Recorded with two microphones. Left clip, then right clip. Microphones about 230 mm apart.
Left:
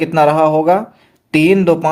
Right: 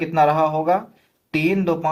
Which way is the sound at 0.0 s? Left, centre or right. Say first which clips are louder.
Left 6 dB; left.